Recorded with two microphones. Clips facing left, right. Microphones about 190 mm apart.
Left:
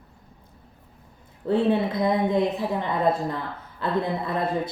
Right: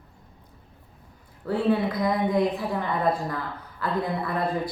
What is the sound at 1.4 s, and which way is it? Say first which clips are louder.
Speech: left 2 dB; 25° left (ahead or behind).